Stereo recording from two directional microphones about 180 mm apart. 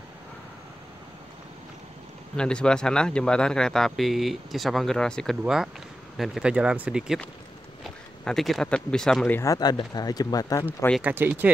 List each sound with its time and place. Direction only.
2.3 s speech: 5° left (ahead or behind)
9.4 s speech: 20° left (ahead or behind)
11.0 s speech: 10° right (ahead or behind)